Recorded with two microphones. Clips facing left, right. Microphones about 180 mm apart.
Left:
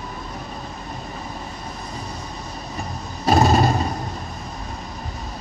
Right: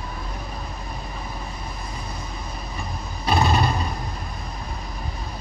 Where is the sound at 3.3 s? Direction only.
45° left (ahead or behind).